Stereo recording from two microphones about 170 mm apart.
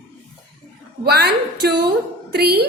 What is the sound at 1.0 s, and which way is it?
A woman's voice, 70° right (ahead or behind).